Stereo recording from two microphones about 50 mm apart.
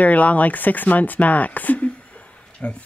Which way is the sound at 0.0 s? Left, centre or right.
Left.